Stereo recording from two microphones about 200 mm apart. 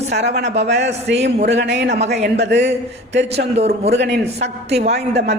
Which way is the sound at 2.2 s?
60° right (ahead or behind).